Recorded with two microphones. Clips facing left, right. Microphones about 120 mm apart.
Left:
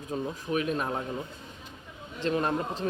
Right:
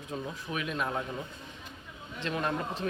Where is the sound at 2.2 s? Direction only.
35° left (ahead or behind).